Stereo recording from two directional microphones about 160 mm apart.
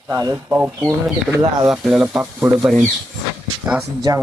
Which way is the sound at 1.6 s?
5° right (ahead or behind).